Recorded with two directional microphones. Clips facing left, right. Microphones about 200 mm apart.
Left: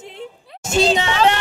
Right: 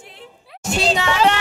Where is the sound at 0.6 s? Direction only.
20° left (ahead or behind).